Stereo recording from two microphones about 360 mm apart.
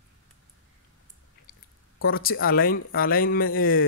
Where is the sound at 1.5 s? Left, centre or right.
Left.